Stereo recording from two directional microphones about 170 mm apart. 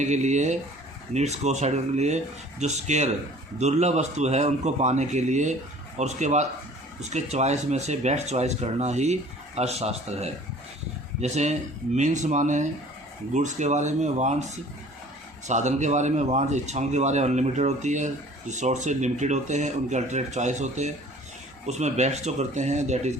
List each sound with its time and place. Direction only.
0.0 s speech: 45° right (ahead or behind)